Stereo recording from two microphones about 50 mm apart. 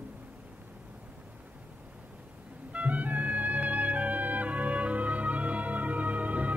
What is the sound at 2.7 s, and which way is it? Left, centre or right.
Music, right.